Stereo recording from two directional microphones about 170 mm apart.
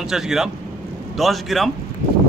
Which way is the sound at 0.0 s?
Centre (ahead or behind).